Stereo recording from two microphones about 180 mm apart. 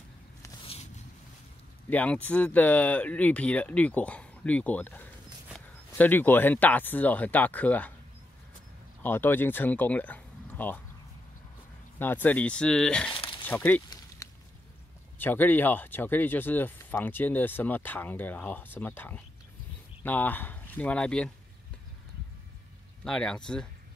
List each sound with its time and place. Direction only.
0.7 s zipper: 35° left (ahead or behind)
1.9 s speech: 10° left (ahead or behind)
9.0 s speech: 10° left (ahead or behind)
12.0 s speech: 10° left (ahead or behind)
13.1 s a sound: 30° left (ahead or behind)
13.4 s speech: 10° left (ahead or behind)
15.1 s speech: 10° left (ahead or behind)
23.0 s speech: 5° left (ahead or behind)